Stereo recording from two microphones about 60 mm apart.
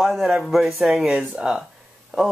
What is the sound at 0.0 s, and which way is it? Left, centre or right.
Speech, centre.